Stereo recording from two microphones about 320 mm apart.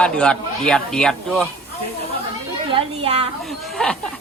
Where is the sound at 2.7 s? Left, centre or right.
Centre.